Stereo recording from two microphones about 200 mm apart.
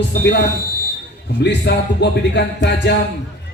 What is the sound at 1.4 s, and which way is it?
Speech, 60° left (ahead or behind).